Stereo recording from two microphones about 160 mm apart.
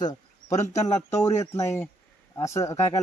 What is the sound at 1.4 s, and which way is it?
Speech, 20° left (ahead or behind).